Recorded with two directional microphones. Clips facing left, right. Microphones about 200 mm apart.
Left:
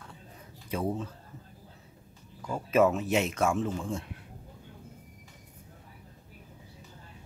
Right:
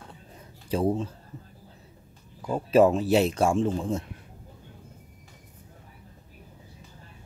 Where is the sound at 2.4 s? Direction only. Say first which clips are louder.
Right 5 dB; 30° right (ahead or behind).